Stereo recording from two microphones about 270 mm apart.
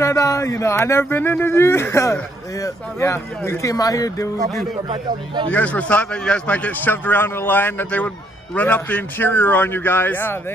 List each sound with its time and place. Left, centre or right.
0.0 s speech: centre
4.8 s speech: centre
5.5 s a man's voice: centre